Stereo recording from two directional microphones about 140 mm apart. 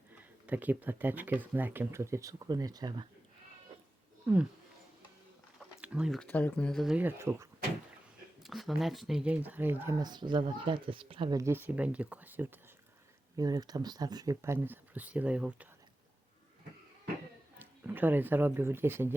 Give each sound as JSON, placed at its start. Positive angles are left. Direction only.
{"t": 0.4, "sound": "speech", "side_deg": -10}
{"t": 5.8, "sound": "speech", "side_deg": -5}
{"t": 6.2, "sound": "speech", "side_deg": 10}
{"t": 6.9, "sound": "speech", "side_deg": -15}
{"t": 8.4, "sound": "speech", "side_deg": 0}
{"t": 10.0, "sound": "speech", "side_deg": -30}
{"t": 11.3, "sound": "speech", "side_deg": -15}
{"t": 13.3, "sound": "speech", "side_deg": -25}
{"t": 17.6, "sound": "speech", "side_deg": -15}